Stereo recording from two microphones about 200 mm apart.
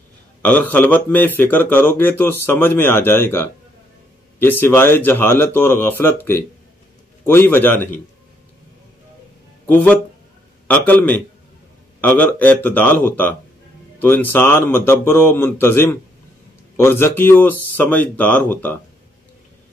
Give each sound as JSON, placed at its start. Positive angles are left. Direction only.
{"t": 0.4, "sound": "speech", "side_deg": 10}
{"t": 9.7, "sound": "speech", "side_deg": 10}